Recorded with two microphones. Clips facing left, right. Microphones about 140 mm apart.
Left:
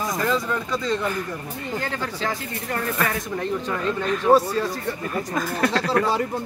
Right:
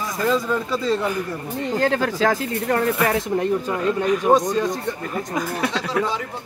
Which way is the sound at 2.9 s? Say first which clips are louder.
Right 5 dB; 30° right (ahead or behind).